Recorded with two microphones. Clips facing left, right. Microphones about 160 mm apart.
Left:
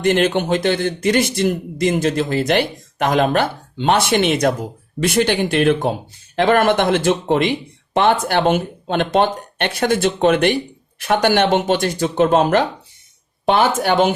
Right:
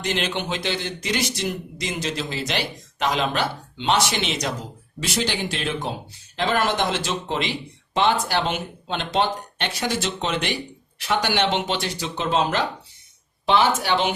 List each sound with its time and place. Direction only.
0.0 s speech: 50° left (ahead or behind)